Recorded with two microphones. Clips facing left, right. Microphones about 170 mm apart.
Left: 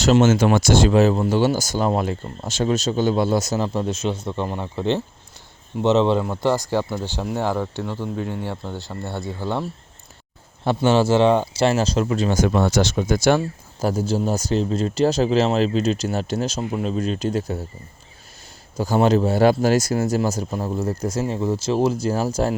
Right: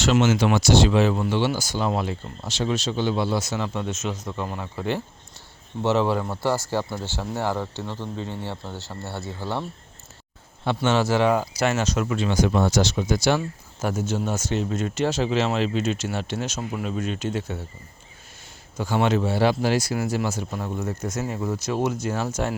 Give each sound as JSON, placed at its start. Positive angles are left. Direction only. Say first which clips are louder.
{"t": 0.0, "sound": "speech", "louder": "left 4 dB", "side_deg": 45}
{"t": 10.8, "sound": "speech", "louder": "left 4 dB", "side_deg": 30}
{"t": 13.8, "sound": "speech", "louder": "left 4 dB", "side_deg": 35}
{"t": 18.8, "sound": "speech", "louder": "left 5 dB", "side_deg": 40}